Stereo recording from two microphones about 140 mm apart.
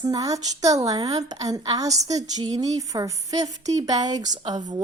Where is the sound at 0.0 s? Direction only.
25° right (ahead or behind).